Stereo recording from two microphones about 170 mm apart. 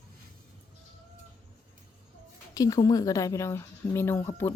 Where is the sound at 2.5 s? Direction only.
20° left (ahead or behind).